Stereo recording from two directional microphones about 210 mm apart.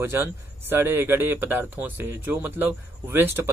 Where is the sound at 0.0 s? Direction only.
10° right (ahead or behind).